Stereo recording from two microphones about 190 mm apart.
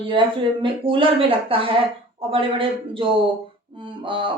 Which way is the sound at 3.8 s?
25° right (ahead or behind).